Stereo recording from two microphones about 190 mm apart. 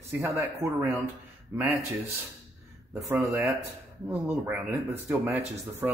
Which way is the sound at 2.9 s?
15° right (ahead or behind).